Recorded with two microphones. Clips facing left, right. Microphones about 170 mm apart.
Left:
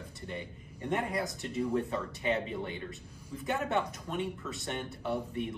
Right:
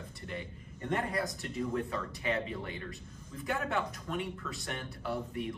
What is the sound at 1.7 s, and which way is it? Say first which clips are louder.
Speech: left 3 dB; 30° left (ahead or behind).